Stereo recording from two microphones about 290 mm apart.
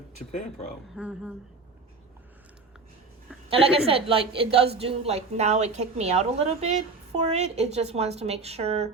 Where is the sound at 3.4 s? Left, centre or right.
Centre.